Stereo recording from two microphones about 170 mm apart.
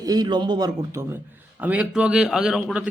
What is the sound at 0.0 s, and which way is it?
A man's voice, 20° right (ahead or behind).